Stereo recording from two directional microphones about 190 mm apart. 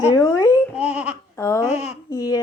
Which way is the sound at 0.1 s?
15° left (ahead or behind).